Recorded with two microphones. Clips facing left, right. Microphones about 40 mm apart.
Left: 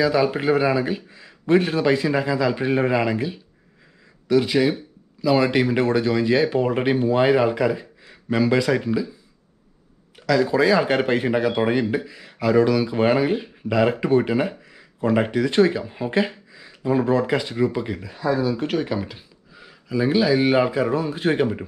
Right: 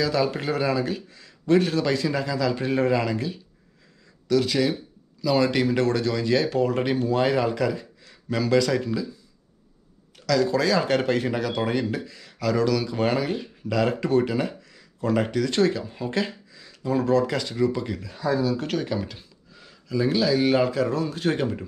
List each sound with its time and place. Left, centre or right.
0.0 s speech: centre
10.1 s speech: left